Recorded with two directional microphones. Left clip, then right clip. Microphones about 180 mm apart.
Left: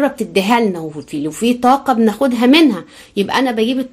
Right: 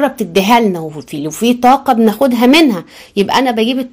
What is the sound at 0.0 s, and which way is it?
Speech, 40° right (ahead or behind).